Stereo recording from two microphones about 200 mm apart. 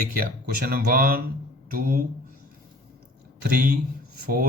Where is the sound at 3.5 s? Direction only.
45° right (ahead or behind).